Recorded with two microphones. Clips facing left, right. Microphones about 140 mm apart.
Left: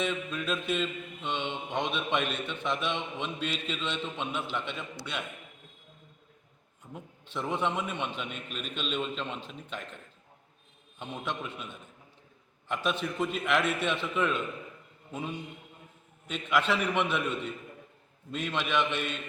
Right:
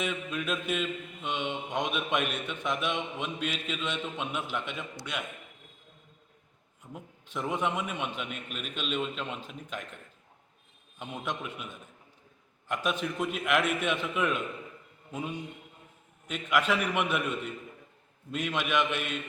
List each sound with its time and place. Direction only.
0.0 s mantra: 10° right (ahead or behind)
6.9 s mantra: 10° right (ahead or behind)
11.0 s mantra: 10° right (ahead or behind)
16.2 s mantra: 10° right (ahead or behind)
18.3 s mantra: 5° right (ahead or behind)